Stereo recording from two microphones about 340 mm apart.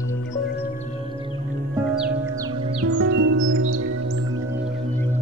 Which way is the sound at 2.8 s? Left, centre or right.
Right.